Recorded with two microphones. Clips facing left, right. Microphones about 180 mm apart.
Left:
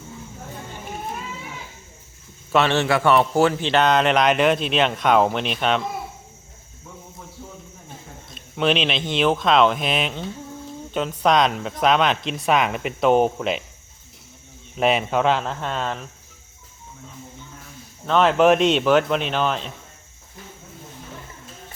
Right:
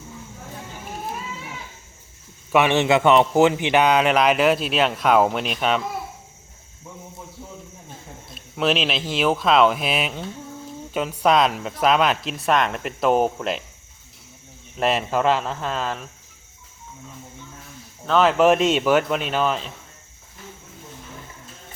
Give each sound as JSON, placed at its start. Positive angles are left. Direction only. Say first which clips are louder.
{"t": 0.9, "sound": "music", "louder": "even", "side_deg": -5}
{"t": 2.5, "sound": "a man's voice", "louder": "right 2 dB", "side_deg": -15}
{"t": 8.4, "sound": "a man's voice", "louder": "left 1 dB", "side_deg": -5}
{"t": 14.8, "sound": "a man's voice", "louder": "left 2 dB", "side_deg": 0}
{"t": 18.0, "sound": "a man's voice", "louder": "even", "side_deg": 0}